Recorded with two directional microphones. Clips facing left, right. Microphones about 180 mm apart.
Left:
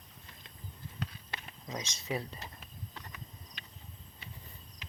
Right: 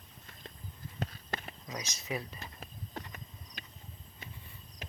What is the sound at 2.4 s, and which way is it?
Clip-clop, 50° right (ahead or behind).